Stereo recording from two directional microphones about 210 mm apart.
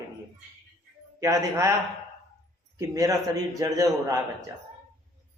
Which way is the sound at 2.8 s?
15° right (ahead or behind).